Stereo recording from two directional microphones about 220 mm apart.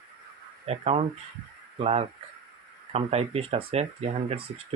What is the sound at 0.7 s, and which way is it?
Speech, 30° right (ahead or behind).